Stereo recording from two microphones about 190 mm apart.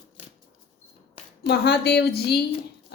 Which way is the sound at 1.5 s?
60° left (ahead or behind).